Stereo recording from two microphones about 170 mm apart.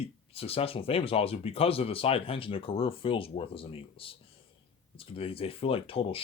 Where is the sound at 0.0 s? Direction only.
35° left (ahead or behind).